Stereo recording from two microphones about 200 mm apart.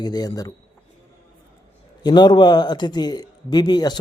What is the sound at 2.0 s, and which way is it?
Speech, 20° left (ahead or behind).